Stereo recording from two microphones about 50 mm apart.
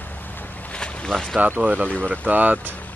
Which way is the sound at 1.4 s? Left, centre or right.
Right.